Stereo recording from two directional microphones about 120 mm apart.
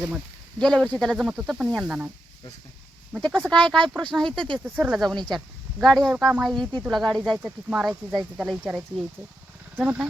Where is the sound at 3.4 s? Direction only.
10° left (ahead or behind).